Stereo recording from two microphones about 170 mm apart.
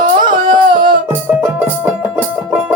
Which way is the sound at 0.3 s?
25° right (ahead or behind).